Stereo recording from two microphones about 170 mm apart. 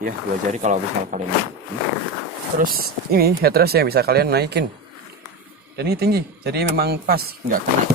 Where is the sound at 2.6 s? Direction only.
60° right (ahead or behind).